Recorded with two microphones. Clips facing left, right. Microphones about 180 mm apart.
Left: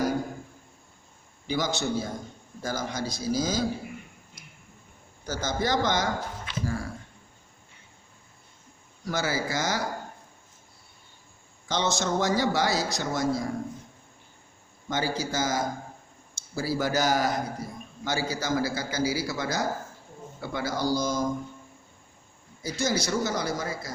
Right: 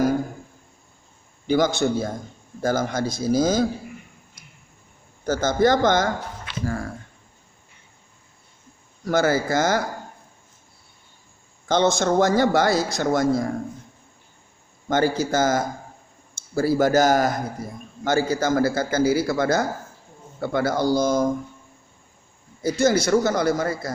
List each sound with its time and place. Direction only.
1.5 s a man's voice: 55° right (ahead or behind)
5.2 s speech: 50° right (ahead or behind)
9.0 s a man's voice: 50° right (ahead or behind)
11.7 s a man's voice: 55° right (ahead or behind)
14.8 s a man's voice: 50° right (ahead or behind)
22.6 s a man's voice: 55° right (ahead or behind)